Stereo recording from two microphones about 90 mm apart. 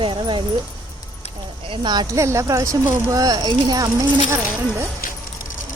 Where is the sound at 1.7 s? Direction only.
55° right (ahead or behind).